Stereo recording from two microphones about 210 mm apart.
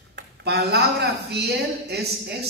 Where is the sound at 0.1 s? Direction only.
50° right (ahead or behind).